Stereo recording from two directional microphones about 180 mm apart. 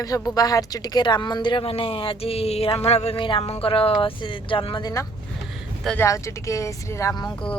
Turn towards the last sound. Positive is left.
turn(degrees=20)  # may be behind; listen again after turning